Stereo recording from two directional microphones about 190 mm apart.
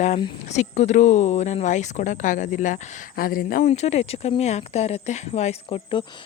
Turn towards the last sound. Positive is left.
turn(degrees=25)  # may be behind; listen again after turning